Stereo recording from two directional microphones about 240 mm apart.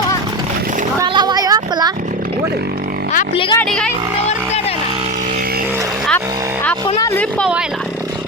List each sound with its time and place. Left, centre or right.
0.9 s a sound: centre
3.1 s speech: left
3.6 s speech: centre
6.8 s speech: centre